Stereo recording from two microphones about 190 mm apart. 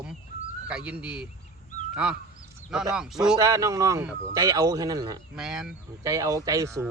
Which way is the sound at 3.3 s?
15° right (ahead or behind).